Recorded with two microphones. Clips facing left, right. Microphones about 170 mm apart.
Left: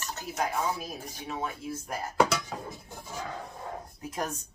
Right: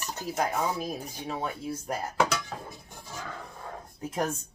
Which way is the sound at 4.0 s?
25° right (ahead or behind).